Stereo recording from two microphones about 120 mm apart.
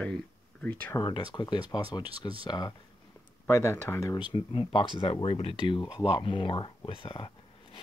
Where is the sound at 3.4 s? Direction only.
20° left (ahead or behind).